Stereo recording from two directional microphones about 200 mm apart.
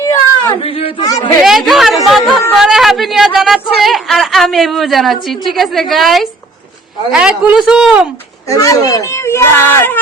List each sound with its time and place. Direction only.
0.0 s speech: 20° left (ahead or behind)
1.5 s chatter: centre (ahead or behind)
2.0 s a sound: centre (ahead or behind)
2.6 s speech: centre (ahead or behind)
8.4 s speech: 15° left (ahead or behind)